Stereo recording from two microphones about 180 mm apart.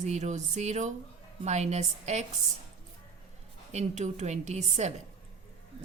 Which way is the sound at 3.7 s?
40° right (ahead or behind).